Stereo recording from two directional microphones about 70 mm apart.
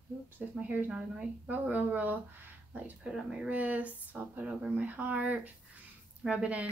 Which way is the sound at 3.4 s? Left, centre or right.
Right.